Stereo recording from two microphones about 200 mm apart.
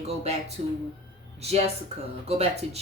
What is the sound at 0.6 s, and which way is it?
Speech, 35° right (ahead or behind).